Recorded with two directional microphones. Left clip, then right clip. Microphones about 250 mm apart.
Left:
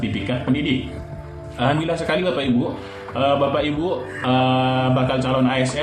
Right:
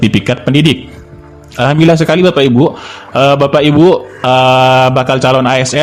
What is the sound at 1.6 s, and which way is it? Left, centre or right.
Speech, right.